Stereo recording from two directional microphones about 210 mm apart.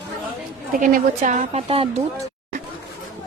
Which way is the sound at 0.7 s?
40° right (ahead or behind).